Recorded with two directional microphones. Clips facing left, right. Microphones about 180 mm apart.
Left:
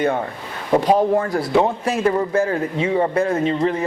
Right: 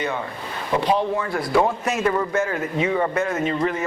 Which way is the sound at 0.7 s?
45° left (ahead or behind).